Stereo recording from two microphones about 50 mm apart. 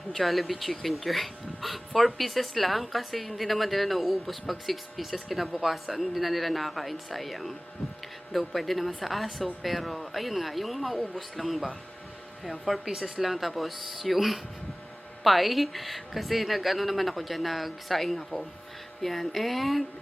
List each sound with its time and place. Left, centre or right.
0.1 s speech: centre